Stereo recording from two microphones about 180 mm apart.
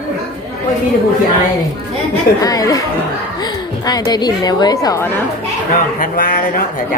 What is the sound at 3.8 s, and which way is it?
A woman's voice, 20° left (ahead or behind).